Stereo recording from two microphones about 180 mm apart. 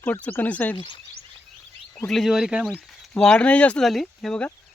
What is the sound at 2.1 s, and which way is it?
Speech, centre (ahead or behind).